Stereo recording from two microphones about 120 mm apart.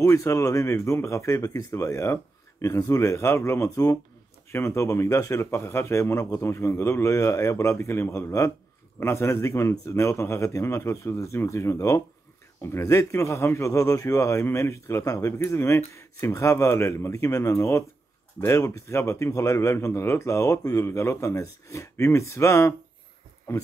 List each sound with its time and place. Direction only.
0.0 s speech: 25° left (ahead or behind)